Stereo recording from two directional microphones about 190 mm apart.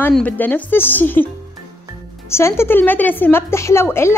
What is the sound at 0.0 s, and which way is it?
A woman's voice, 10° left (ahead or behind).